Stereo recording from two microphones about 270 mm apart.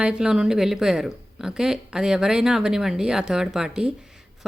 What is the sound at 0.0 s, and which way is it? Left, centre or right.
A man's voice, centre.